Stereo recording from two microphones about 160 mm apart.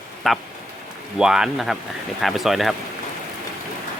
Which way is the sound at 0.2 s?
Centre (ahead or behind).